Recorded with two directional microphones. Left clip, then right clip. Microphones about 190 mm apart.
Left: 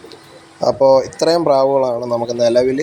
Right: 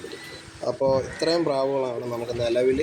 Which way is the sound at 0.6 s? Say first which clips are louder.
Left 11 dB; 35° left (ahead or behind).